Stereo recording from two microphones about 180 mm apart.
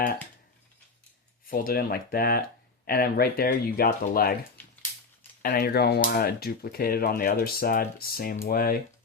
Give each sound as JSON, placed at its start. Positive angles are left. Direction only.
{"t": 1.5, "sound": "speech", "side_deg": 55}
{"t": 5.4, "sound": "speech", "side_deg": 60}